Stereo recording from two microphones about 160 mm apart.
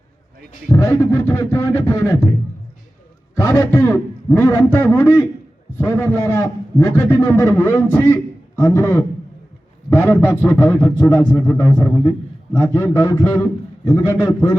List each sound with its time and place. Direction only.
0.7 s a man's voice: 20° left (ahead or behind)
3.3 s a man's voice: 20° left (ahead or behind)